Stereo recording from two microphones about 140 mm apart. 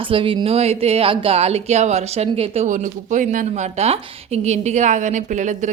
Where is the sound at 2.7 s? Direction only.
60° right (ahead or behind).